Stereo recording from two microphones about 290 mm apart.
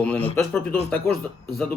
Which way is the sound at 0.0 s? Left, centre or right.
Centre.